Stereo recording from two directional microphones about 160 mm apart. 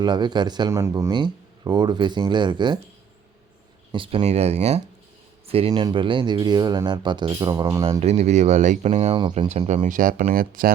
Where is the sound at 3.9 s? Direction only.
30° right (ahead or behind).